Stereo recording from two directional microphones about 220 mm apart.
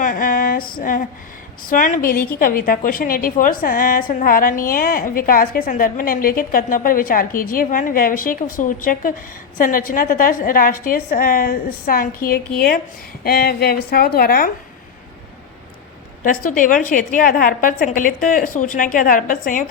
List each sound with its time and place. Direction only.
0.0 s a sound: 40° left (ahead or behind)
1.6 s a woman's voice: 35° left (ahead or behind)
16.2 s a woman's voice: 40° left (ahead or behind)